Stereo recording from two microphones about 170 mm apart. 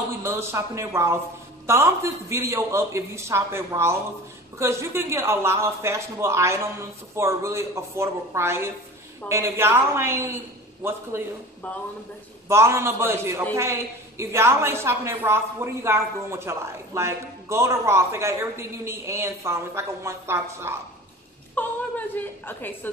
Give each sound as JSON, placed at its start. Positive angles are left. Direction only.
{"t": 0.2, "sound": "a woman's voice", "side_deg": -15}
{"t": 12.4, "sound": "a woman's voice", "side_deg": -15}
{"t": 21.5, "sound": "a woman's voice", "side_deg": 10}